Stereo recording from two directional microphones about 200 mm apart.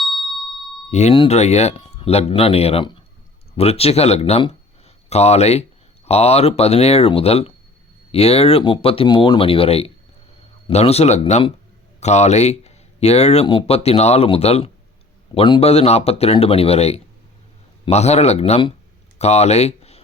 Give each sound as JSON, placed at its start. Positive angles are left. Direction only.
{"t": 0.0, "sound": "ding", "side_deg": 0}
{"t": 0.9, "sound": "speech", "side_deg": 35}